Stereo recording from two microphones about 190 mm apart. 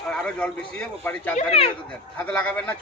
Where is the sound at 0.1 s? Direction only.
5° left (ahead or behind).